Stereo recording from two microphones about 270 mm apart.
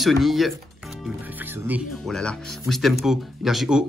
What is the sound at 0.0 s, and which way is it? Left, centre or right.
Speech, centre.